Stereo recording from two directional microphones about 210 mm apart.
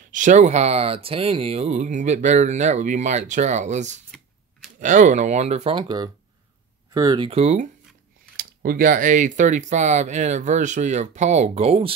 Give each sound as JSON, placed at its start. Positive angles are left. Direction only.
{"t": 0.1, "sound": "speech", "side_deg": -35}
{"t": 8.4, "sound": "speech", "side_deg": -45}